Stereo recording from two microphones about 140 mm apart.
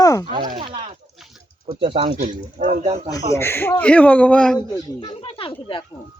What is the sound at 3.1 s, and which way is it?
Speech, 20° left (ahead or behind).